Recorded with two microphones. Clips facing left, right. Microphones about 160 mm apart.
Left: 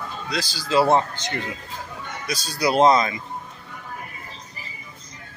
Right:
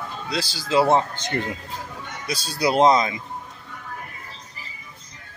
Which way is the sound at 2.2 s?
30° right (ahead or behind).